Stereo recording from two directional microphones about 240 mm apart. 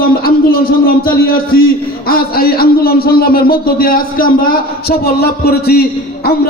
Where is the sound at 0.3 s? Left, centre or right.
Left.